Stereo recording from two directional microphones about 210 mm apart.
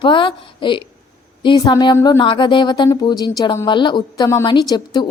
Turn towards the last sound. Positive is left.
turn(degrees=20)  # may be behind; listen again after turning